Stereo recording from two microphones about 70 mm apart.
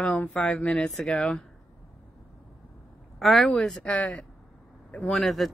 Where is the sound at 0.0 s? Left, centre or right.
Centre.